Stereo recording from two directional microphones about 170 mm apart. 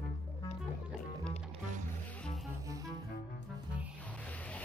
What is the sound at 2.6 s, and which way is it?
Music, 20° right (ahead or behind).